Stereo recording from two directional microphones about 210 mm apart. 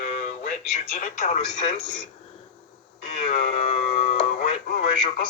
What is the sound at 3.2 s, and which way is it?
Music, 30° left (ahead or behind).